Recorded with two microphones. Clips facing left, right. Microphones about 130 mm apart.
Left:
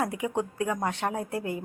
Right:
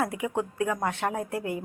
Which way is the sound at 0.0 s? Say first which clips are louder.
Even; 25° left (ahead or behind).